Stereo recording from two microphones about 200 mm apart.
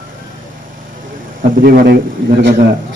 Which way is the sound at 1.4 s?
45° right (ahead or behind).